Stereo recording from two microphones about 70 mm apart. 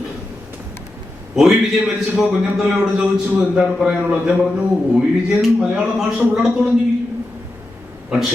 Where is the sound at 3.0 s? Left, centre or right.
Centre.